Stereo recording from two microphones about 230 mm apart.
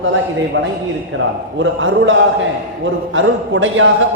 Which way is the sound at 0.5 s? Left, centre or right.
Right.